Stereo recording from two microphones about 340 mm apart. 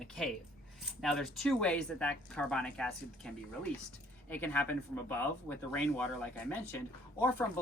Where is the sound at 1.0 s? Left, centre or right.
Centre.